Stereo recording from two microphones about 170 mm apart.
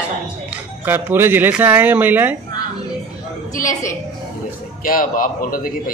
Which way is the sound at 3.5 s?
20° left (ahead or behind).